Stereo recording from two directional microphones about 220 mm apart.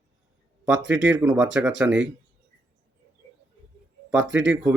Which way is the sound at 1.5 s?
5° right (ahead or behind).